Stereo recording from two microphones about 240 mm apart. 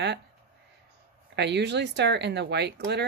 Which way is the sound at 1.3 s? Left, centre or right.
Right.